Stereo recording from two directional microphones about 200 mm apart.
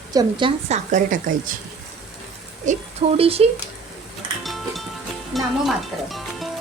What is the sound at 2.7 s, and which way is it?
Speech, 40° right (ahead or behind).